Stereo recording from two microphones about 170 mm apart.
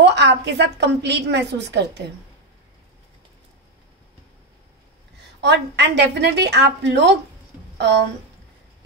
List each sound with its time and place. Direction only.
0.0 s a woman's voice: 90° right
5.4 s a woman's voice: 90° right